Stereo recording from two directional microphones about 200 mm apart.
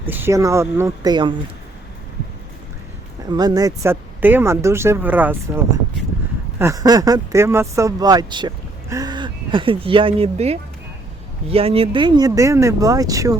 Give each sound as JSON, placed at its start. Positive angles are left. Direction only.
{"t": 0.1, "sound": "speech", "side_deg": -10}
{"t": 3.2, "sound": "speech", "side_deg": -20}